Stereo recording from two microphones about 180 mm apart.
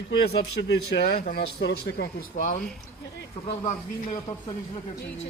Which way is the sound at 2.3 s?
45° left (ahead or behind).